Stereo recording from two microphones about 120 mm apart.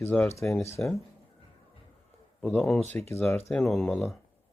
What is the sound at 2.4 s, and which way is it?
Speech, 10° left (ahead or behind).